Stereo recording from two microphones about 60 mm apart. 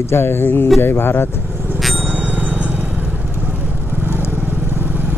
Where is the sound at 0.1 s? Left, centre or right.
Left.